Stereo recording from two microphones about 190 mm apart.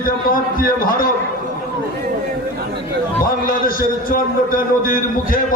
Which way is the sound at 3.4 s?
50° left (ahead or behind).